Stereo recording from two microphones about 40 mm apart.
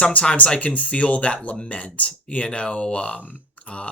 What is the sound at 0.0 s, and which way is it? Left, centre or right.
Speech, left.